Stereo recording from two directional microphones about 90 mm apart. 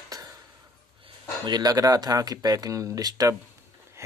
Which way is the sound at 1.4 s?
50° right (ahead or behind).